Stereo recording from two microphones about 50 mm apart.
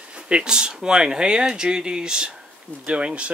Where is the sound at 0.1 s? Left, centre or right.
Centre.